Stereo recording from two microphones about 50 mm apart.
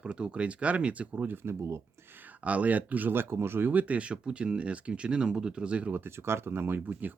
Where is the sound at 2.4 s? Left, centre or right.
Right.